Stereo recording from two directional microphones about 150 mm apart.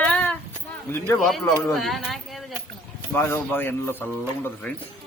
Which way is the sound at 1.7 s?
Centre (ahead or behind).